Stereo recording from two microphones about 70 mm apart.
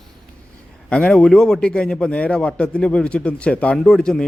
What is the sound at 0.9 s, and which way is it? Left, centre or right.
Speech, centre.